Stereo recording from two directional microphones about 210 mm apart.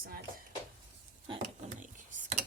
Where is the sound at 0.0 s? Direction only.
45° right (ahead or behind).